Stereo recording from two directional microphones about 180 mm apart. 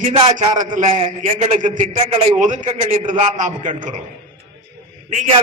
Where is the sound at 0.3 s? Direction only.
45° right (ahead or behind).